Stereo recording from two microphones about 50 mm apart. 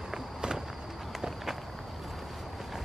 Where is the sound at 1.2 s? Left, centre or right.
Centre.